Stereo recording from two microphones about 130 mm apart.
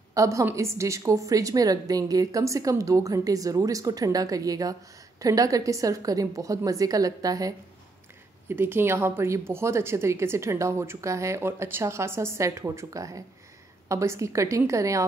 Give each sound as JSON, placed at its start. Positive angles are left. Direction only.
{"t": 0.1, "sound": "a woman's voice", "side_deg": -25}
{"t": 8.5, "sound": "a woman's voice", "side_deg": -15}